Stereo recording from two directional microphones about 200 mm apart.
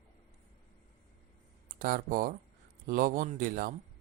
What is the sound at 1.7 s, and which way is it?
Speech, 45° right (ahead or behind).